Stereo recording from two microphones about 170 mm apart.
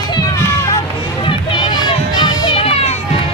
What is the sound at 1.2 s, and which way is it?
Run, 25° left (ahead or behind).